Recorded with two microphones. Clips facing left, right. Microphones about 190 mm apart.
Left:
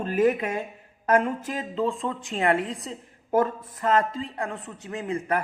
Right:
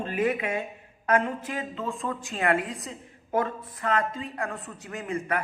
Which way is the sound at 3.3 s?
45° left (ahead or behind).